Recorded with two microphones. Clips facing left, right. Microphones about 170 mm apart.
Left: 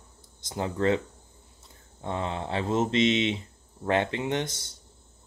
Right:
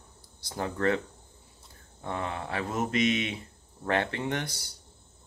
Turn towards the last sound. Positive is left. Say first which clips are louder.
# left 3 dB
turn(degrees=20)  # may be behind; listen again after turning